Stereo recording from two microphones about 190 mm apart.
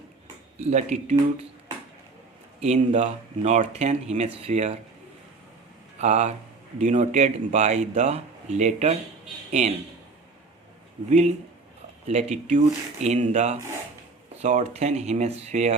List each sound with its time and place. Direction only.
0.6 s speech: 35° right (ahead or behind)
2.6 s speech: 40° right (ahead or behind)
6.0 s speech: 35° right (ahead or behind)
11.1 s speech: 35° right (ahead or behind)